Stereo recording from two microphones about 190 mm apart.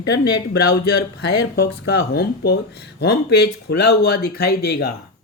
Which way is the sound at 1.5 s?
55° left (ahead or behind).